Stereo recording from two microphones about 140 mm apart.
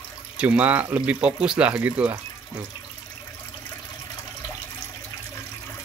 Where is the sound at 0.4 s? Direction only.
10° right (ahead or behind).